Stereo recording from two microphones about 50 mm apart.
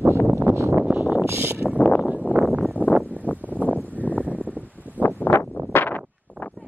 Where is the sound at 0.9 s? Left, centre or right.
Right.